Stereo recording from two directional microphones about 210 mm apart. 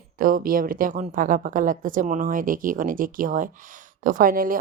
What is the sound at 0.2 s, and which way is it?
A woman's voice, 40° right (ahead or behind).